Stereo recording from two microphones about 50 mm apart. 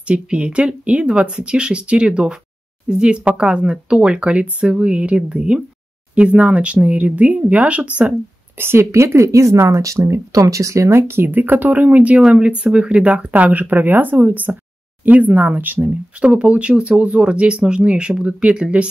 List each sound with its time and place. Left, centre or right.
0.1 s speech: right
8.5 s speech: right
10.9 s speech: right
12.2 s speech: centre
13.3 s speech: right
16.2 s speech: right